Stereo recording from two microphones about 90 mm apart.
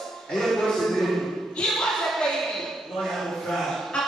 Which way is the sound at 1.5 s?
5° left (ahead or behind).